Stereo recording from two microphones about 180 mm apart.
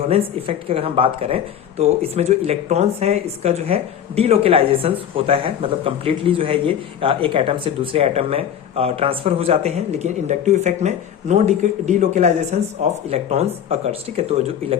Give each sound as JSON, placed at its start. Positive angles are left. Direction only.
{"t": 0.0, "sound": "speech", "side_deg": -35}